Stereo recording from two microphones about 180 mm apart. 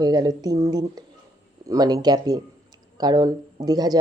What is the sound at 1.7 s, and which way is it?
Speech, 20° right (ahead or behind).